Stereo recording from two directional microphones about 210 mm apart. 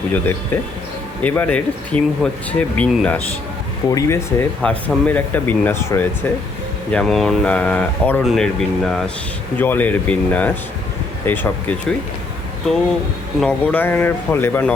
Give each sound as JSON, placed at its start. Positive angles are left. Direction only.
{"t": 0.1, "sound": "speech", "side_deg": 10}
{"t": 13.4, "sound": "speech", "side_deg": 5}